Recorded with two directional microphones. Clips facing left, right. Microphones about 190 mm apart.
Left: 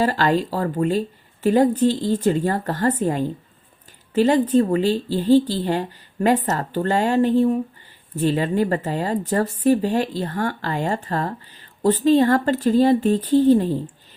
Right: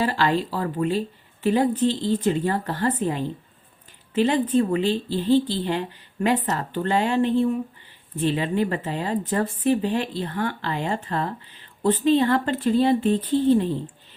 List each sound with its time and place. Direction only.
0.0 s speech: 45° left (ahead or behind)